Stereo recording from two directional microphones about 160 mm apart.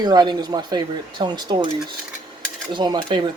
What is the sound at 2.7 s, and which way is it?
Speech, 30° right (ahead or behind).